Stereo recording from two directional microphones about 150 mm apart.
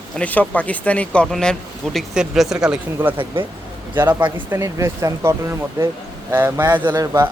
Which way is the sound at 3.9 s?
15° right (ahead or behind).